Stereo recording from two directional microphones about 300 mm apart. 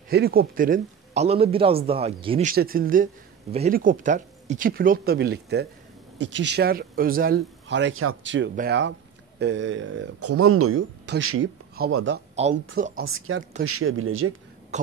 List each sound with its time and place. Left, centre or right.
0.1 s speech: right
2.5 s speech: right
13.0 s speech: right
13.4 s speech: right
13.7 s speech: right
14.7 s throat clearing: right